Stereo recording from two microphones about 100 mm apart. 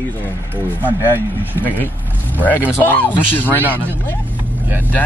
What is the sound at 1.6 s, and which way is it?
Speech, 20° left (ahead or behind).